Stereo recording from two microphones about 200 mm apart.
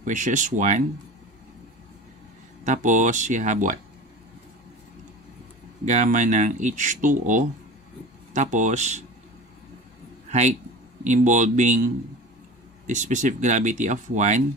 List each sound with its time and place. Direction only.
0.0 s speech: 40° right (ahead or behind)
2.6 s speech: 40° right (ahead or behind)
5.9 s speech: 35° right (ahead or behind)
11.1 s speech: 40° right (ahead or behind)